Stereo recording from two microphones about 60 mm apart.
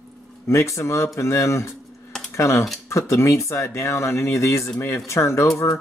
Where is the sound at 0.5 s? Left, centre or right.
Left.